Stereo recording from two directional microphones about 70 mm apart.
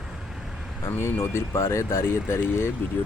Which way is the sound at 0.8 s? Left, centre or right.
Left.